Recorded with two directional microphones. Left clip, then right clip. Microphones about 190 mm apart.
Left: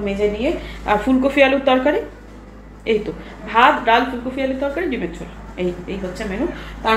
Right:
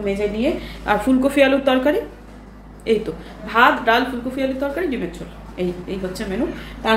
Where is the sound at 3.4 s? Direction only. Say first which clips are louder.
Left 1 dB; 10° right (ahead or behind).